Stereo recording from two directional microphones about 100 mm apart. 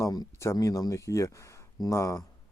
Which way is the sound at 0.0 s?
40° left (ahead or behind).